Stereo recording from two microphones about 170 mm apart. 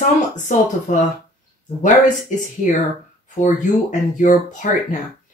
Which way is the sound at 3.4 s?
50° left (ahead or behind).